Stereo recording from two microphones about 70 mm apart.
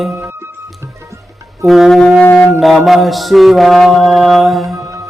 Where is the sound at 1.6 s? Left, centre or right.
Centre.